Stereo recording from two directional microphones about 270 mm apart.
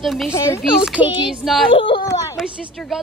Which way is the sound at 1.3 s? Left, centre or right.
Centre.